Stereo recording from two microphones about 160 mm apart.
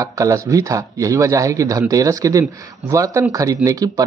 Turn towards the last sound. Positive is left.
turn(degrees=-20)  # may be behind; listen again after turning